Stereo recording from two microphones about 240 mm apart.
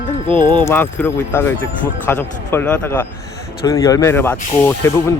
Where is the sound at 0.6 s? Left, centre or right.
Centre.